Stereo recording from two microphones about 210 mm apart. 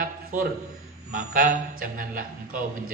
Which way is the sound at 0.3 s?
40° right (ahead or behind).